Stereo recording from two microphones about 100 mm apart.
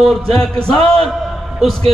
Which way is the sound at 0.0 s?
Centre (ahead or behind).